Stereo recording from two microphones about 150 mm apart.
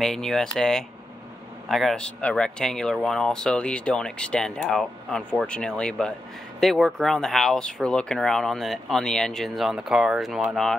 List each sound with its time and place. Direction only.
0.0 s speech: 5° left (ahead or behind)